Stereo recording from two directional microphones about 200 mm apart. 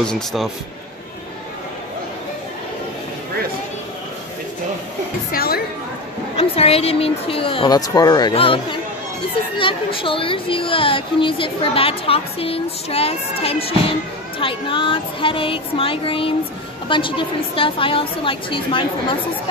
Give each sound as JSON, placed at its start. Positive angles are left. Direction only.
{"t": 0.0, "sound": "speech", "side_deg": 0}
{"t": 5.3, "sound": "music", "side_deg": 50}
{"t": 6.3, "sound": "a woman's voice", "side_deg": 30}